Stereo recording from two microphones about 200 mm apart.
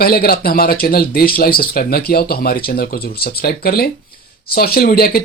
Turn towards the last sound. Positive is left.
turn(degrees=50)  # may be behind; listen again after turning